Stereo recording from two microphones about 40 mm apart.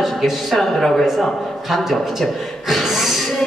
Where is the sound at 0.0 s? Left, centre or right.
Centre.